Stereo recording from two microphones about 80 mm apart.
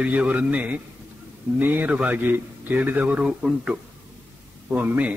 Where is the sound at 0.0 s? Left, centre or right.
Centre.